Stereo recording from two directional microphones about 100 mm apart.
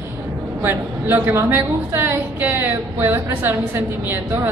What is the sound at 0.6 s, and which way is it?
A woman's voice, 25° right (ahead or behind).